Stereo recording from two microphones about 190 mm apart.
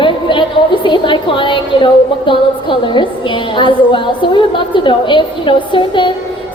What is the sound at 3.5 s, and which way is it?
A woman's voice, 25° left (ahead or behind).